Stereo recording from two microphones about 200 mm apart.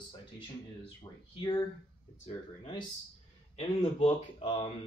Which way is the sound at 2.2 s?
25° left (ahead or behind).